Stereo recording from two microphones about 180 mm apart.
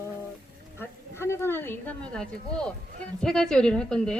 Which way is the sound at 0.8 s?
15° left (ahead or behind).